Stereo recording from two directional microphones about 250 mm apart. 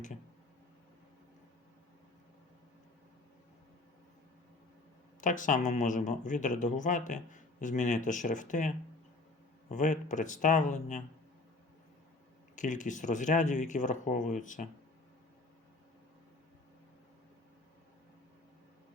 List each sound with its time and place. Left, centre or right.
5.2 s speech: left
12.5 s speech: left